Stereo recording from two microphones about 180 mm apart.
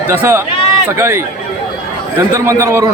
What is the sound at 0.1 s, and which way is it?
A man's voice, 10° right (ahead or behind).